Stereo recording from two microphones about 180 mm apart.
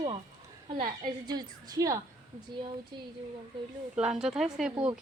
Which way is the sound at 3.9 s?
5° right (ahead or behind).